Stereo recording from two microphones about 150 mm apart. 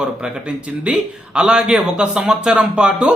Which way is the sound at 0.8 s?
5° right (ahead or behind).